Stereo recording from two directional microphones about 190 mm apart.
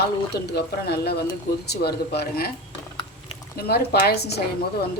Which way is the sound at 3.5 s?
55° left (ahead or behind).